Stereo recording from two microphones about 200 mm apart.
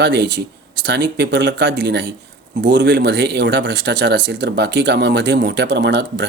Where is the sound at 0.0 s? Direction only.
60° right (ahead or behind).